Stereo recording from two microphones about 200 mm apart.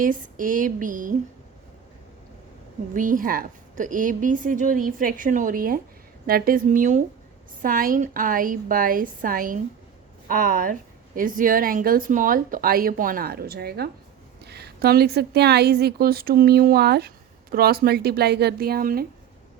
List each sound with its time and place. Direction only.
0.0 s a woman's voice: 40° right (ahead or behind)
2.9 s a woman's voice: 40° right (ahead or behind)